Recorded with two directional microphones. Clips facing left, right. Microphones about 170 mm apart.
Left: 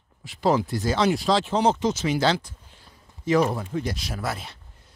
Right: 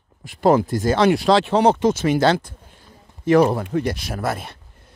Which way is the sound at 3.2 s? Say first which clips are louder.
Right 6 dB; 65° right (ahead or behind).